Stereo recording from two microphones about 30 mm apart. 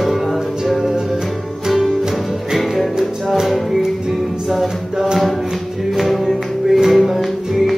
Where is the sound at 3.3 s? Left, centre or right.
Centre.